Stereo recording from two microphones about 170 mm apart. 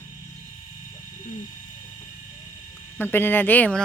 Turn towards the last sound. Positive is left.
turn(degrees=5)  # may be behind; listen again after turning